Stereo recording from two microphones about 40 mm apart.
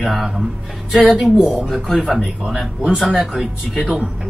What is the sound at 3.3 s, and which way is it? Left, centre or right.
Speech, centre.